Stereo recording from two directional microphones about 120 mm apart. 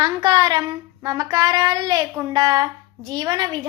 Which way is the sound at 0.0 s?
30° right (ahead or behind).